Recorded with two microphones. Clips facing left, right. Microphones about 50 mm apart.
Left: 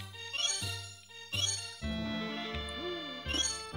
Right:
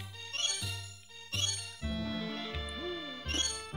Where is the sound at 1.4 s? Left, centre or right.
Left.